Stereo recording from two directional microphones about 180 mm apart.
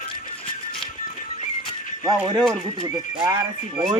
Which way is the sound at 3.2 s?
20° right (ahead or behind).